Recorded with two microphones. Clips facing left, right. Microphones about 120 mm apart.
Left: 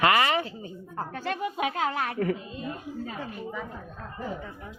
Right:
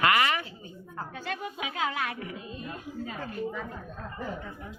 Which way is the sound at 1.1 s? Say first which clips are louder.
Left 6 dB; 65° left (ahead or behind).